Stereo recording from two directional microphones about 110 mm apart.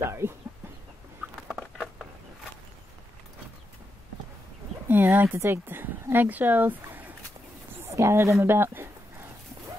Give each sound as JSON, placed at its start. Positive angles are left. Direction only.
{"t": 0.0, "sound": "speech", "side_deg": -25}
{"t": 4.8, "sound": "a woman's voice", "side_deg": -20}